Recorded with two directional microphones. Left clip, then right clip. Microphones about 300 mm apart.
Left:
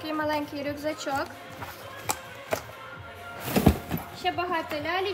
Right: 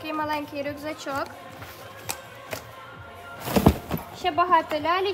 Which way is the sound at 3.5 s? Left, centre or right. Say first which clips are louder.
Right 3 dB; centre.